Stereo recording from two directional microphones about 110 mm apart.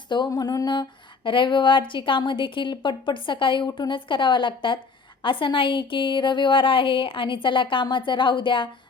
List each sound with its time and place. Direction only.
0.3 s a woman's voice: 35° left (ahead or behind)